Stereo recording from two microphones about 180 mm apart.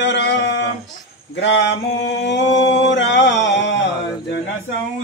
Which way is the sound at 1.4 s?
90° left.